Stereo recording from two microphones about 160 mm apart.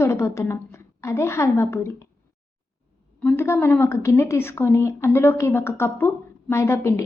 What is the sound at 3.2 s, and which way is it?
Speech, 15° left (ahead or behind).